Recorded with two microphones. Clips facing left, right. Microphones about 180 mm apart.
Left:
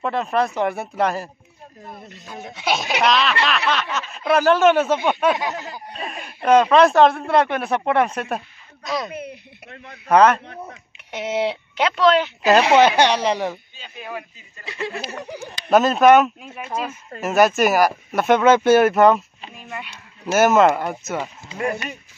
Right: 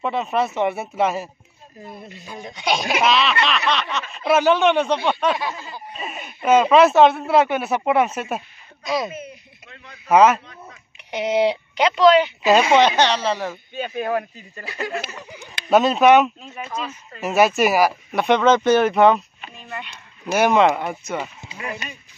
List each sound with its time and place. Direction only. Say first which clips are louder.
0.0 s speech: left 1 dB; centre (ahead or behind)
5.5 s snicker: left 3 dB; 70° left (ahead or behind)
5.9 s speech: even; 5° right (ahead or behind)
9.1 s speech: left 3 dB; 65° left (ahead or behind)
10.0 s speech: even; 5° right (ahead or behind); by 13.6 s 15° left (ahead or behind)
13.7 s speech: right 10 dB; 55° right (ahead or behind)
15.0 s speech: left 6 dB; 65° left (ahead or behind)
15.7 s speech: left 1 dB; centre (ahead or behind)